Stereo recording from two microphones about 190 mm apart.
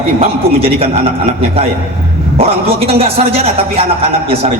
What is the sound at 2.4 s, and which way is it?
A man's voice, 30° right (ahead or behind).